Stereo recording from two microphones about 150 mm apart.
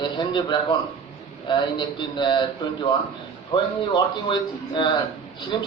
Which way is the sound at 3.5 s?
30° left (ahead or behind).